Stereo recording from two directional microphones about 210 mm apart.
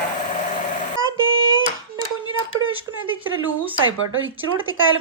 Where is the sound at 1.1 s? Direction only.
70° right (ahead or behind).